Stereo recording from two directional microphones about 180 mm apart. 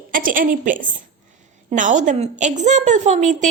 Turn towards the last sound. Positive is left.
turn(degrees=-40)  # may be behind; listen again after turning